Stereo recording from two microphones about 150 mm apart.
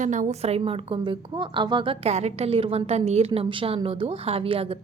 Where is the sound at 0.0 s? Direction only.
55° right (ahead or behind).